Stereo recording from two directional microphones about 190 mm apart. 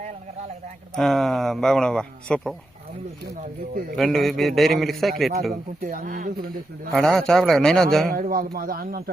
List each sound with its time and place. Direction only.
0.9 s speech: centre (ahead or behind)
3.9 s speech: centre (ahead or behind)
5.8 s speech: 45° right (ahead or behind)
6.9 s speech: centre (ahead or behind)
8.1 s speech: 50° right (ahead or behind)